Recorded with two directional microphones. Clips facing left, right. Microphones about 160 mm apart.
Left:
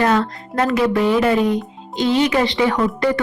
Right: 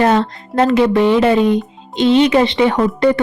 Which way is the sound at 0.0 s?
25° right (ahead or behind).